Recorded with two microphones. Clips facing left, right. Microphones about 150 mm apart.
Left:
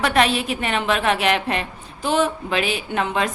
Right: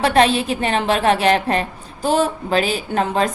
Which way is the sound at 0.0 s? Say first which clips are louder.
Right 4 dB; 35° right (ahead or behind).